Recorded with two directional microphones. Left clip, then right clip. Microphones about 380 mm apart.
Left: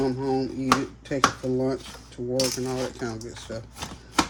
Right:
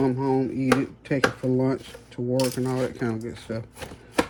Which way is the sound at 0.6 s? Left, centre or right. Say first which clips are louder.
Even; right.